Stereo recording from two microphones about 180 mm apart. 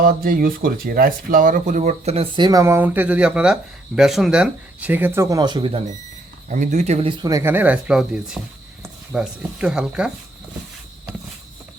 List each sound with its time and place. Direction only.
0.0 s speech: 50° right (ahead or behind); by 5.8 s 25° right (ahead or behind)
6.5 s speech: 40° right (ahead or behind)
7.2 s speech: 20° right (ahead or behind)